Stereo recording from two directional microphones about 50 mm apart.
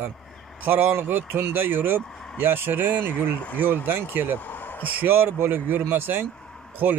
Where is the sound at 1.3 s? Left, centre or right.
Right.